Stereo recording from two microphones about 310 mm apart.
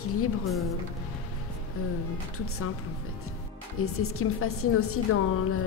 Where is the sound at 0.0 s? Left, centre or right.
Left.